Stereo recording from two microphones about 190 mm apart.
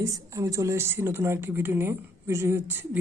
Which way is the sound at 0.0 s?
15° right (ahead or behind).